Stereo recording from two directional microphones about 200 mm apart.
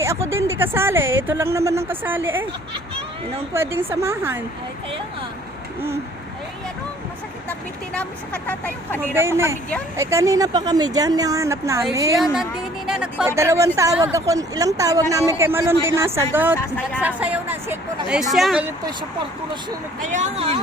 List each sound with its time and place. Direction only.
0.0 s speech: 15° right (ahead or behind)
3.8 s speech: 10° right (ahead or behind)
7.9 s speech: 5° left (ahead or behind)
9.1 s speech: 10° right (ahead or behind)
12.2 s speech: centre (ahead or behind)
16.6 s speech: 10° left (ahead or behind)
17.0 s speech: 5° right (ahead or behind)
20.0 s speech: 35° right (ahead or behind)